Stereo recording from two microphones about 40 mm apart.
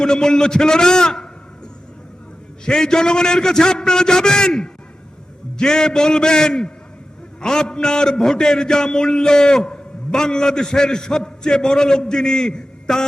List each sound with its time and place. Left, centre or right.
0.0 s a man's voice: centre
2.6 s a man's voice: centre